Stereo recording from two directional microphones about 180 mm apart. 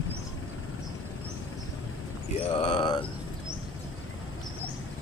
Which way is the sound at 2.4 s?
30° left (ahead or behind).